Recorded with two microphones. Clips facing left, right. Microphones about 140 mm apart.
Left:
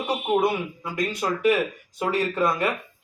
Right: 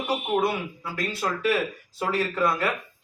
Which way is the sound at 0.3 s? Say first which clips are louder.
Left 4 dB; 20° left (ahead or behind).